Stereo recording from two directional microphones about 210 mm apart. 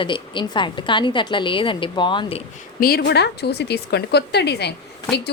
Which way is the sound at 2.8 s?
45° left (ahead or behind).